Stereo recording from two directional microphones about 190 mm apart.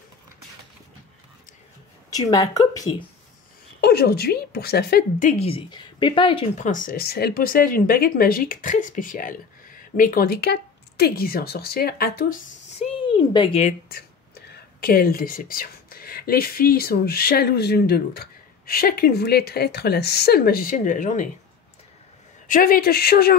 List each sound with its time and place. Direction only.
2.0 s a woman's voice: 20° left (ahead or behind)
3.8 s a woman's voice: 55° left (ahead or behind)
5.4 s speech: 30° left (ahead or behind); by 12.4 s 50° left (ahead or behind)
12.7 s a sound: 25° left (ahead or behind)
14.8 s speech: 50° left (ahead or behind)
22.5 s speech: 50° left (ahead or behind)